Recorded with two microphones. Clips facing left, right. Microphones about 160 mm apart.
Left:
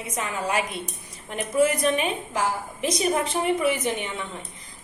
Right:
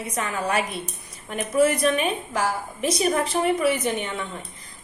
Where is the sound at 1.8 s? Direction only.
25° left (ahead or behind).